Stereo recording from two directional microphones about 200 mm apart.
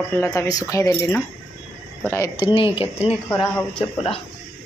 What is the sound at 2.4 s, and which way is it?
Speech, 25° left (ahead or behind).